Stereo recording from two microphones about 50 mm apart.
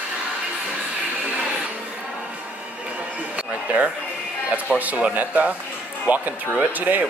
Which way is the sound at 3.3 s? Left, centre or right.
Right.